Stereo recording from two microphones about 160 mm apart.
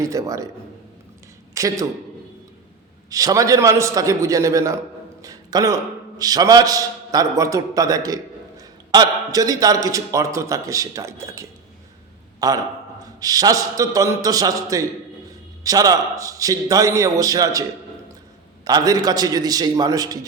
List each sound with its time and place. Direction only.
0.0 s a man's voice: 20° right (ahead or behind)
1.5 s a man's voice: 20° right (ahead or behind)
3.1 s a man's voice: 20° right (ahead or behind)